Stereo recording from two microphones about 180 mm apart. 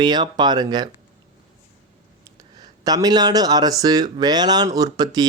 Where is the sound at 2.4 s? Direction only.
20° right (ahead or behind).